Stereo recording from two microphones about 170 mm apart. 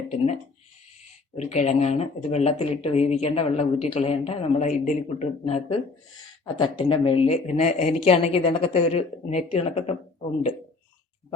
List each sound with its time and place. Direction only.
0.1 s speech: 40° left (ahead or behind)
1.4 s speech: 40° left (ahead or behind)